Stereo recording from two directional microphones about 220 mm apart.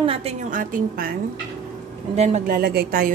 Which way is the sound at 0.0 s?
25° right (ahead or behind).